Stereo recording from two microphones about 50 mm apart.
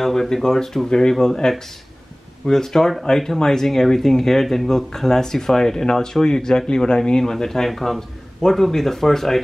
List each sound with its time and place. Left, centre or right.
0.0 s speech: centre